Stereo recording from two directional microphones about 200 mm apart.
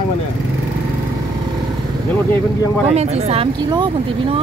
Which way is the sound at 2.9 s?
30° right (ahead or behind).